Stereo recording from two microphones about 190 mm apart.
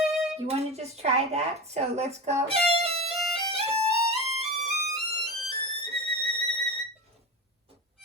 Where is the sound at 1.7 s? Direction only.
35° right (ahead or behind).